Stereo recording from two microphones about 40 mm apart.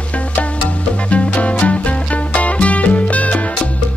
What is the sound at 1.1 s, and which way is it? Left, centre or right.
Music, left.